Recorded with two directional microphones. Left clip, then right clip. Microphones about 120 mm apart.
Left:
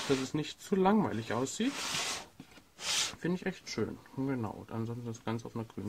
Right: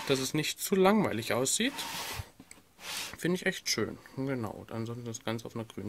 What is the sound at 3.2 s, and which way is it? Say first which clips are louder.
Speech: right 5 dB; 10° right (ahead or behind).